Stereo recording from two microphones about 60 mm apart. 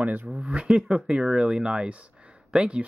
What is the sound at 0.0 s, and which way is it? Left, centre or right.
Speech, right.